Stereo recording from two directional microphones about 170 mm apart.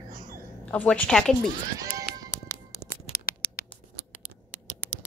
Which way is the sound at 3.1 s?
60° left (ahead or behind).